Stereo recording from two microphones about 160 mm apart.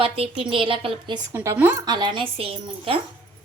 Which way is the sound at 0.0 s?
35° right (ahead or behind).